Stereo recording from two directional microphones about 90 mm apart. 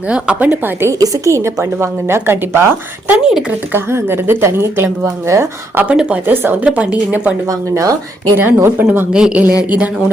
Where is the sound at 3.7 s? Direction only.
25° right (ahead or behind).